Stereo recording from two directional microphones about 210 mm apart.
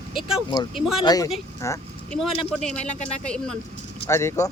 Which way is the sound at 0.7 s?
Centre (ahead or behind).